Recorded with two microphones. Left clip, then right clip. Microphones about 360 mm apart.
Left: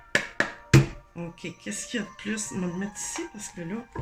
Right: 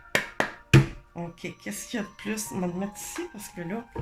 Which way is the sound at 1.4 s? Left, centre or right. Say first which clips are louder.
Left 1 dB; centre.